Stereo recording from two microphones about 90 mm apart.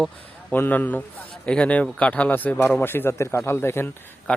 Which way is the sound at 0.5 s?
20° left (ahead or behind).